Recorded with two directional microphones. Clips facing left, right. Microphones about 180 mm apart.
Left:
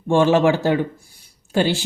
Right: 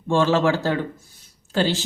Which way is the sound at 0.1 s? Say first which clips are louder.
Left 4 dB; 15° left (ahead or behind).